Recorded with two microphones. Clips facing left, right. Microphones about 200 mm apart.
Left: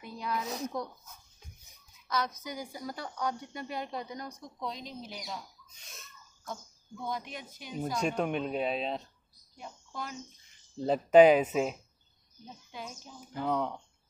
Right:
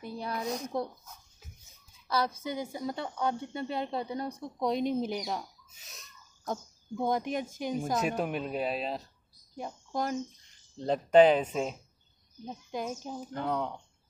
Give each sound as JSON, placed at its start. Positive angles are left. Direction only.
{"t": 0.0, "sound": "a sound", "side_deg": -30}
{"t": 0.7, "sound": "speech", "side_deg": -30}
{"t": 2.0, "sound": "a woman's voice", "side_deg": -30}
{"t": 4.6, "sound": "speech", "side_deg": -60}
{"t": 5.7, "sound": "a sound", "side_deg": 0}
{"t": 6.4, "sound": "speech", "side_deg": -45}
{"t": 8.2, "sound": "speech", "side_deg": -5}
{"t": 9.6, "sound": "speech", "side_deg": -40}
{"t": 10.8, "sound": "speech", "side_deg": 5}
{"t": 12.7, "sound": "speech", "side_deg": -45}
{"t": 13.3, "sound": "speech", "side_deg": 0}